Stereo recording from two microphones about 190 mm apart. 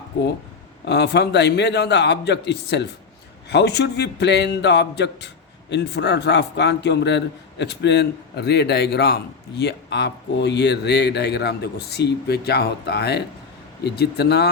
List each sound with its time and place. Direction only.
0.9 s a man's voice: 60° left (ahead or behind)